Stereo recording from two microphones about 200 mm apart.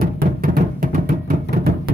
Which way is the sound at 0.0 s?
45° right (ahead or behind).